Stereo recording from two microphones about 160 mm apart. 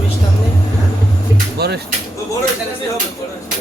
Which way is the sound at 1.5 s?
90° right.